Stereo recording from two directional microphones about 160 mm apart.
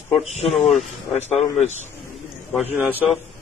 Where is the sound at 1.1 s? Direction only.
45° left (ahead or behind).